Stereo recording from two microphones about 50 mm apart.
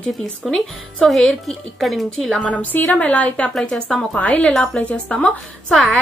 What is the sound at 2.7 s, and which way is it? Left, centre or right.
Speech, left.